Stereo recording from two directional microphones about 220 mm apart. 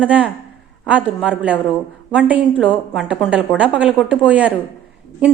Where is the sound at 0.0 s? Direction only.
5° right (ahead or behind).